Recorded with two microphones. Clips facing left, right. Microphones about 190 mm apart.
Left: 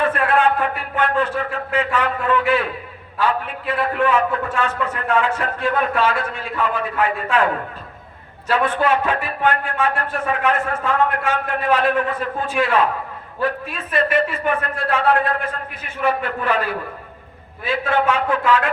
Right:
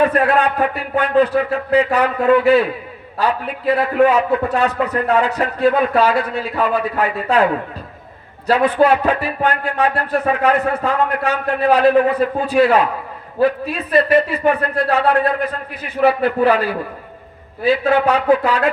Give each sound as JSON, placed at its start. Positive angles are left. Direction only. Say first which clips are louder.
{"t": 0.1, "sound": "a man's voice", "louder": "right 2 dB", "side_deg": -40}
{"t": 8.4, "sound": "a man's voice", "louder": "right 5 dB", "side_deg": -35}